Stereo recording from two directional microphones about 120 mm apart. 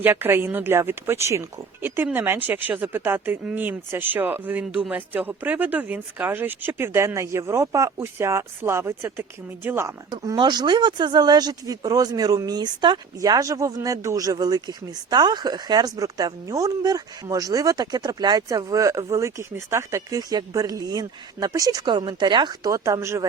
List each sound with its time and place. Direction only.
0.0 s speech: 15° right (ahead or behind)
10.1 s speech: 35° right (ahead or behind)